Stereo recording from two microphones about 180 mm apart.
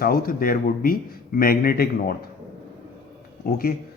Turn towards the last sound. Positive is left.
turn(degrees=55)  # may be behind; listen again after turning